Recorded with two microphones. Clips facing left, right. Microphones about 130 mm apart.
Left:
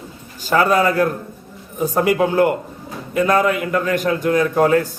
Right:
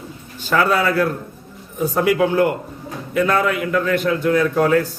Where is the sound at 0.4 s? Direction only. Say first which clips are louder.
Left 2 dB; 45° left (ahead or behind).